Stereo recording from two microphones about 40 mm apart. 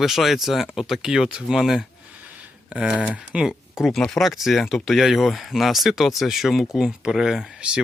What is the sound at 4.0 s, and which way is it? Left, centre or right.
Speech, centre.